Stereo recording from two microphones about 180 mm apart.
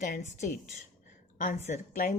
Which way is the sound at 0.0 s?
45° left (ahead or behind).